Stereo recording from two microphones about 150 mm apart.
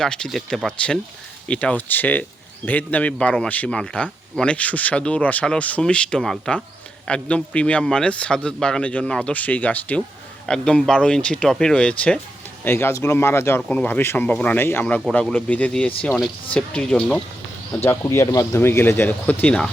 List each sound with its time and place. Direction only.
0.0 s speech: 5° left (ahead or behind)
17.8 s speech: 20° left (ahead or behind)